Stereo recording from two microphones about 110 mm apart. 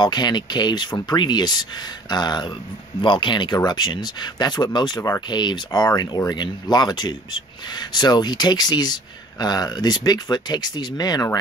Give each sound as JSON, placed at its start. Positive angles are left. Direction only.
{"t": 0.0, "sound": "speech", "side_deg": 40}